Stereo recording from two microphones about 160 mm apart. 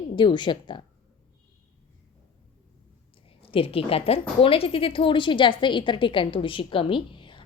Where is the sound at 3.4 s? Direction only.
35° left (ahead or behind).